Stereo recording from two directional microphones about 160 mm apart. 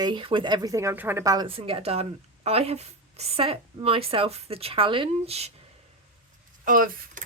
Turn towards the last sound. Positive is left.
turn(degrees=-60)  # may be behind; listen again after turning